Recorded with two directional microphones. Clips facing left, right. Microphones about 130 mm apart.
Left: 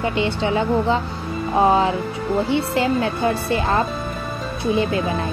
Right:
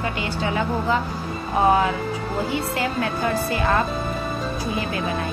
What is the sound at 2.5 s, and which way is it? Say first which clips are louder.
A woman's voice: left 5 dB; 25° left (ahead or behind).